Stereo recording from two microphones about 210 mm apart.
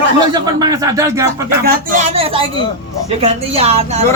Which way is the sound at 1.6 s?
35° right (ahead or behind).